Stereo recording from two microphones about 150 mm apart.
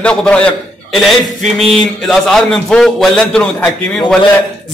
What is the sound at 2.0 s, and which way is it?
A man's voice, 5° left (ahead or behind).